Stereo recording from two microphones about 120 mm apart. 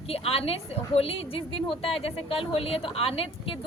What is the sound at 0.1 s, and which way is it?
A woman's voice, 55° left (ahead or behind).